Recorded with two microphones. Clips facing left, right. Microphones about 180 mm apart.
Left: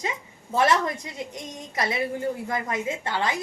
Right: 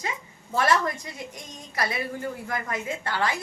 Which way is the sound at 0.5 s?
20° left (ahead or behind).